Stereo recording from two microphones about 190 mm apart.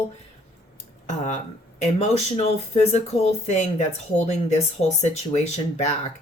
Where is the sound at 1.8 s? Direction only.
35° left (ahead or behind).